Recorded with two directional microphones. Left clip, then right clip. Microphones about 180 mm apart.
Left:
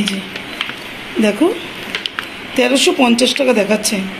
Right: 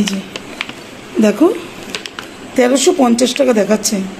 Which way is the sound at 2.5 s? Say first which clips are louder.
Right 1 dB; 50° right (ahead or behind).